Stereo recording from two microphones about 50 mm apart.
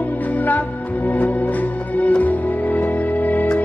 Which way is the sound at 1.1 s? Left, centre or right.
Left.